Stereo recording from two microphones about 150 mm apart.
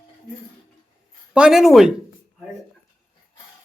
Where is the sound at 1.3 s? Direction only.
5° right (ahead or behind).